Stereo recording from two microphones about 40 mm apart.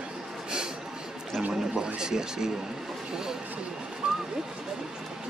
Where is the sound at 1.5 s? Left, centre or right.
Centre.